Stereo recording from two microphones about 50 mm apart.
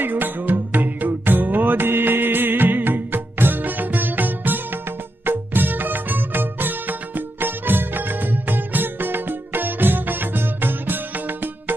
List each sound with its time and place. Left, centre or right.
0.0 s music: right